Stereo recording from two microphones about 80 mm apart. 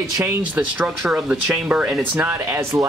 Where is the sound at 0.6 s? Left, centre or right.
Centre.